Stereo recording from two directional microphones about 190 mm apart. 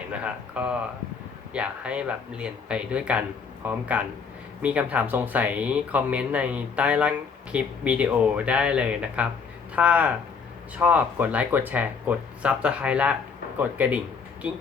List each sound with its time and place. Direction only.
0.1 s speech: 5° right (ahead or behind)